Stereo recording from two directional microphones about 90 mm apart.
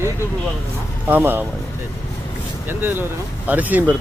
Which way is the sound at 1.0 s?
20° right (ahead or behind).